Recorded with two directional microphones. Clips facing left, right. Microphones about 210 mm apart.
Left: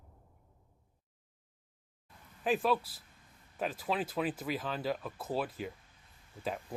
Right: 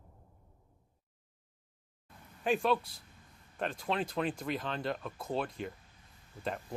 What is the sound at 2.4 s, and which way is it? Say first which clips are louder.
Speech: even; centre (ahead or behind).